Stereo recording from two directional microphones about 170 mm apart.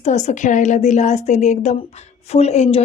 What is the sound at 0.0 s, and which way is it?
A woman's voice, 45° left (ahead or behind).